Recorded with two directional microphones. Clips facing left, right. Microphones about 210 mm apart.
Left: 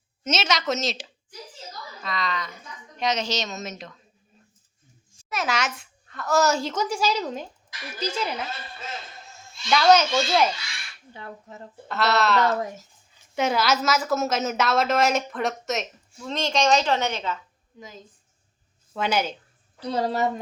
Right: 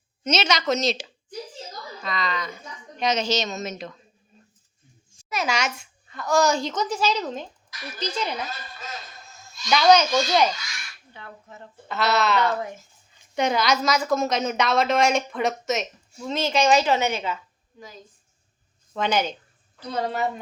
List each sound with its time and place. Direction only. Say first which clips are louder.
0.3 s a woman's voice: right 2 dB; centre (ahead or behind)
2.0 s a woman's voice: right 1 dB; centre (ahead or behind)
5.3 s a child's voice: right 1 dB; centre (ahead or behind)
8.4 s speech: left 1 dB; 30° left (ahead or behind)
9.6 s a woman's voice: right 1 dB; centre (ahead or behind)
10.5 s speech: even; 30° left (ahead or behind)
11.9 s a woman's voice: even; centre (ahead or behind)
17.7 s a woman's voice: left 1 dB; 20° left (ahead or behind)
18.9 s a child's voice: right 1 dB; 5° left (ahead or behind)
19.8 s a woman's voice: left 2 dB; 35° left (ahead or behind)